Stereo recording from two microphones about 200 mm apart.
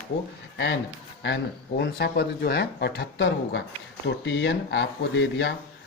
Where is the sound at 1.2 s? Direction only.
65° left (ahead or behind).